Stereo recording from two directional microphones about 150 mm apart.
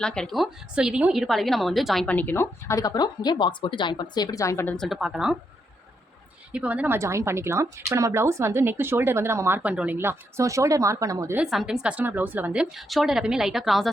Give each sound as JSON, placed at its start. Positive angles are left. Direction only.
{"t": 0.0, "sound": "a woman's voice", "side_deg": 5}
{"t": 4.8, "sound": "a woman's voice", "side_deg": -5}
{"t": 6.5, "sound": "a woman's voice", "side_deg": -10}
{"t": 11.3, "sound": "a woman's voice", "side_deg": -5}